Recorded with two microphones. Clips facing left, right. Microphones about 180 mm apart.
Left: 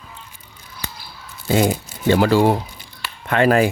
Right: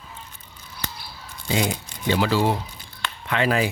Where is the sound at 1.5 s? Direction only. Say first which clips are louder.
Left 7 dB; 50° left (ahead or behind).